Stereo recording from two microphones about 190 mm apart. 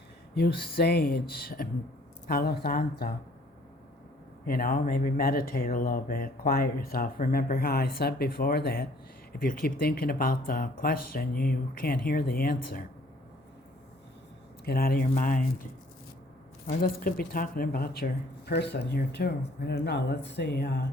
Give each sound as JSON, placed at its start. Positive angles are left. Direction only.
{"t": 0.3, "sound": "speech", "side_deg": 55}
{"t": 4.4, "sound": "speech", "side_deg": 50}
{"t": 14.6, "sound": "speech", "side_deg": 55}
{"t": 16.8, "sound": "speech", "side_deg": 50}